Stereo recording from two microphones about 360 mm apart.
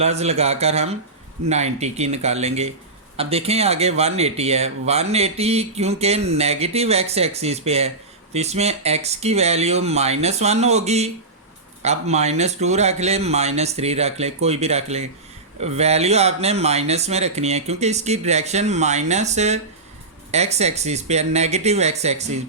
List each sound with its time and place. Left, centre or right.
0.0 s speech: centre